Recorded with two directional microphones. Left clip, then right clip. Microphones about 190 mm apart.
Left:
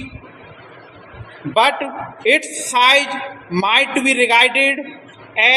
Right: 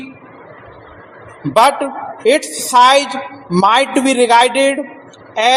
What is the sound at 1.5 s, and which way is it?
Speech, 30° right (ahead or behind).